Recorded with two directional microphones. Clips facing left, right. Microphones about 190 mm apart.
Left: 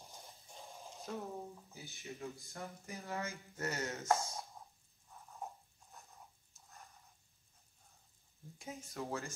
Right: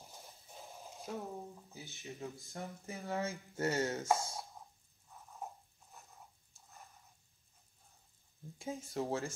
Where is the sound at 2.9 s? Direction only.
30° right (ahead or behind).